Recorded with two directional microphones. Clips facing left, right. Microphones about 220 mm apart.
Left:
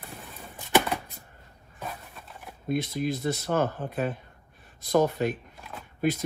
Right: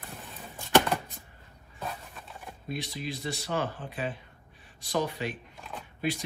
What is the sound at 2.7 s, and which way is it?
Speech, 50° left (ahead or behind).